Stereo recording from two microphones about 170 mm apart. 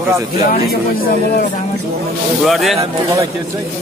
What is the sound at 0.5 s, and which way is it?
Speech, 60° left (ahead or behind).